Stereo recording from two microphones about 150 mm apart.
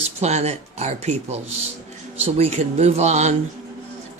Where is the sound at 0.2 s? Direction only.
45° right (ahead or behind).